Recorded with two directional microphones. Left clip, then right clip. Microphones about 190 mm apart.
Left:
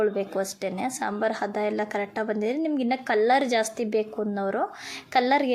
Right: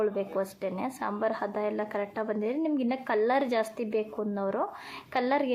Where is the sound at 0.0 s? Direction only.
15° left (ahead or behind).